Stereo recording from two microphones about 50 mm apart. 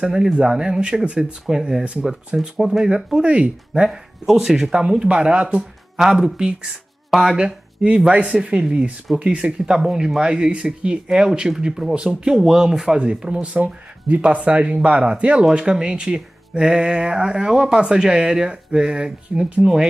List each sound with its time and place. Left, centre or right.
0.0 s speech: centre
3.1 s speech: centre
3.9 s speech: centre
5.9 s speech: centre
7.1 s speech: centre
7.3 s speech: centre
9.8 s speech: centre
11.9 s speech: right
12.3 s speech: centre